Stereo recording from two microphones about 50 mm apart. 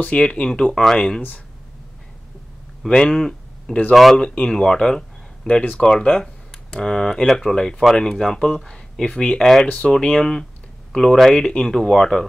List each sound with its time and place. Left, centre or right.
0.0 s speech: centre
2.9 s speech: centre
4.2 s speech: centre
9.4 s speech: centre